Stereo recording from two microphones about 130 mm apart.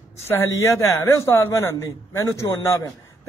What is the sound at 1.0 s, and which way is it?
Speech, 20° left (ahead or behind).